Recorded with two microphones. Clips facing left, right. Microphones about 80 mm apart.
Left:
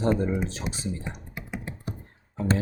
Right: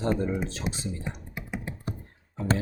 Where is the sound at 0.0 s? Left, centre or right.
Centre.